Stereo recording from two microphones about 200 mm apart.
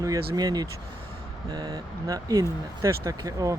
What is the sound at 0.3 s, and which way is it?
Speech, 20° right (ahead or behind).